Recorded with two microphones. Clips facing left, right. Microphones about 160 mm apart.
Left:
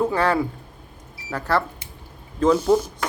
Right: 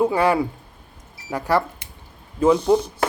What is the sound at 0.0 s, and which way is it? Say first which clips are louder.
Speech: right 2 dB; 10° right (ahead or behind).